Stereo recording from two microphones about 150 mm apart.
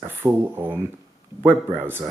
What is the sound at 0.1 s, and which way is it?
Speech, 15° right (ahead or behind).